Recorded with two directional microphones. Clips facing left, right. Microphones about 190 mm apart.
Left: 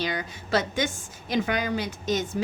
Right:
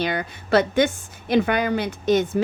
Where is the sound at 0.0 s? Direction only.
60° right (ahead or behind).